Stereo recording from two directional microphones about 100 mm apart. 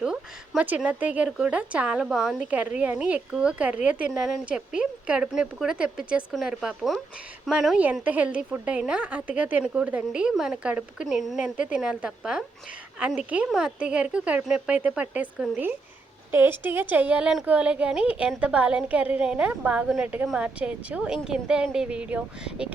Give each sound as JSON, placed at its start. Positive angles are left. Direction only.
{"t": 0.0, "sound": "a sound", "side_deg": -5}
{"t": 0.8, "sound": "a woman's voice", "side_deg": -15}
{"t": 2.5, "sound": "a woman's voice", "side_deg": -15}
{"t": 8.0, "sound": "a woman's voice", "side_deg": -15}
{"t": 11.0, "sound": "a woman's voice", "side_deg": 0}